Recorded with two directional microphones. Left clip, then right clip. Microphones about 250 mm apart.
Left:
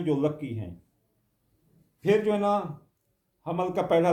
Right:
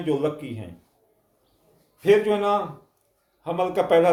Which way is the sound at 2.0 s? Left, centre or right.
Centre.